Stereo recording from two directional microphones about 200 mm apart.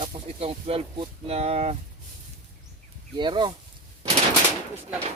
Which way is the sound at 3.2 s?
20° right (ahead or behind).